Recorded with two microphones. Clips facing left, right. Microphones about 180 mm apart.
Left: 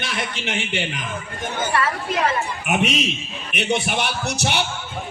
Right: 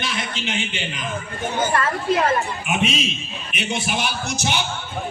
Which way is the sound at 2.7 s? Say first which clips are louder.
Left 3 dB; 65° left (ahead or behind).